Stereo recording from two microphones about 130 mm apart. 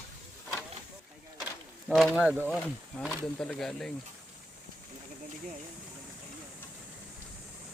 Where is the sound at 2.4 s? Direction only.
Centre (ahead or behind).